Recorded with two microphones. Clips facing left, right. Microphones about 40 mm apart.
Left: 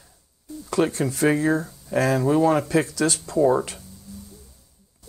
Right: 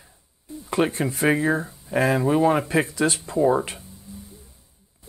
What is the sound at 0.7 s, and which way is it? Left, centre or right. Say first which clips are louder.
Speech: even; right.